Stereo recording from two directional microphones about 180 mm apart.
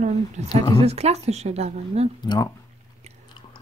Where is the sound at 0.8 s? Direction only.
35° right (ahead or behind).